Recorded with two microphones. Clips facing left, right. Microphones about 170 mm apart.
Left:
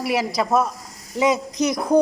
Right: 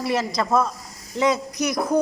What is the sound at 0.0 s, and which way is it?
Speech, 10° left (ahead or behind).